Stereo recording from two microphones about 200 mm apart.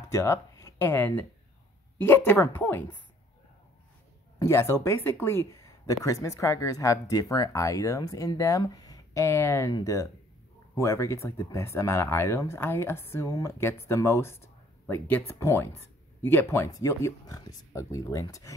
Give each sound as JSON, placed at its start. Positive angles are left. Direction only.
{"t": 0.1, "sound": "speech", "side_deg": 15}
{"t": 4.4, "sound": "speech", "side_deg": 15}